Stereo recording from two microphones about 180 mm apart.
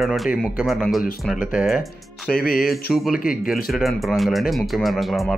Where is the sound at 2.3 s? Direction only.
55° left (ahead or behind).